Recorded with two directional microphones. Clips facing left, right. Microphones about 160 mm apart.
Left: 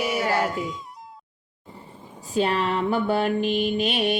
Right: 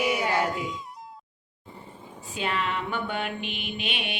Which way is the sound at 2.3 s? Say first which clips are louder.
Left 7 dB; 40° left (ahead or behind).